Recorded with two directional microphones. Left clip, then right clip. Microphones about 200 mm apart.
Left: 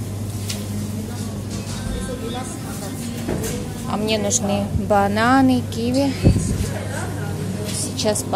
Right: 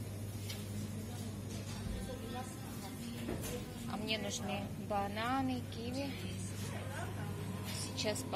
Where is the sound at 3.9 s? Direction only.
20° left (ahead or behind).